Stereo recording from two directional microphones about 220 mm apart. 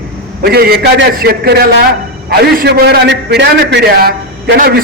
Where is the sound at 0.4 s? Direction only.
45° right (ahead or behind).